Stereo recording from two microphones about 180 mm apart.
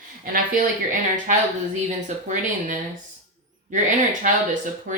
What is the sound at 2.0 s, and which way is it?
Speech, 45° right (ahead or behind).